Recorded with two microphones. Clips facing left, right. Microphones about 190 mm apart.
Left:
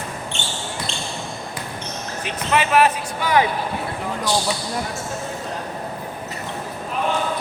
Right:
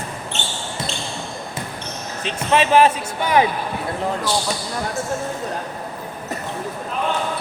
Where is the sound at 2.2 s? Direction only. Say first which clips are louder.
Right 3 dB; 30° right (ahead or behind).